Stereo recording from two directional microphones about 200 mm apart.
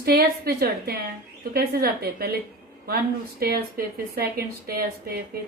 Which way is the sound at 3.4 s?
50° right (ahead or behind).